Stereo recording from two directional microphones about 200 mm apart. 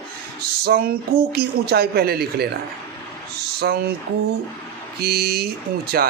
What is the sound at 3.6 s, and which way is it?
Speech, 50° right (ahead or behind).